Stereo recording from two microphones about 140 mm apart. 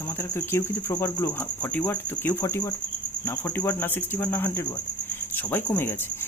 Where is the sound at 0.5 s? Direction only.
15° left (ahead or behind).